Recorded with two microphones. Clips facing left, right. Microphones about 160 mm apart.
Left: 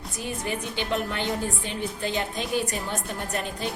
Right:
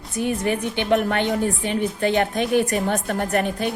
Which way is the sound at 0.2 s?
60° right (ahead or behind).